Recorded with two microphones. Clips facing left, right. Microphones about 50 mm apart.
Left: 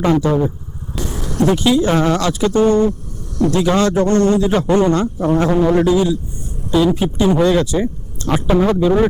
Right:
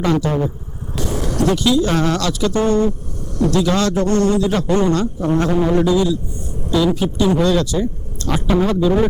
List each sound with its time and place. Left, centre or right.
0.0 s a man's voice: left